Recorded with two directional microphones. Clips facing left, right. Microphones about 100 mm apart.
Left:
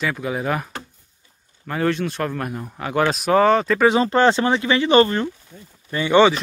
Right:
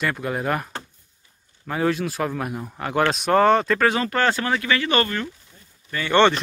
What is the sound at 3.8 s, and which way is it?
Speech, 25° left (ahead or behind).